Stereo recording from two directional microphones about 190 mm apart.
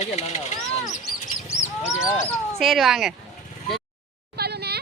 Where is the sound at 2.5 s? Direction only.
Centre (ahead or behind).